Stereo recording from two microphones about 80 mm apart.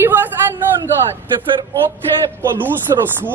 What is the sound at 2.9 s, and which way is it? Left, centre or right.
Speech, right.